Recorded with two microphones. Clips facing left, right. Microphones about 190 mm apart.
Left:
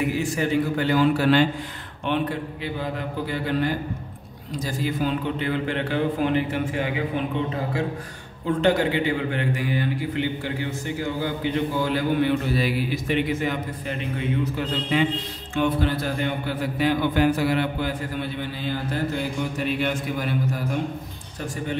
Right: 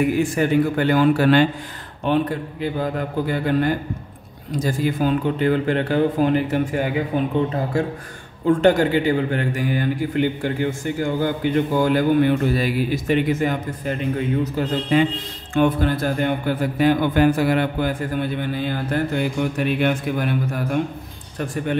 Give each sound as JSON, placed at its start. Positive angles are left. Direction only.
{"t": 0.2, "sound": "a man's voice", "side_deg": -55}
{"t": 8.5, "sound": "a man's voice", "side_deg": -45}